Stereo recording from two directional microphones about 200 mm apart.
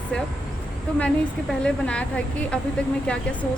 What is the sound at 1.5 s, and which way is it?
Speech, 5° left (ahead or behind).